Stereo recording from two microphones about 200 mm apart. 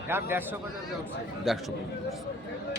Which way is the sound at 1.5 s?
Centre (ahead or behind).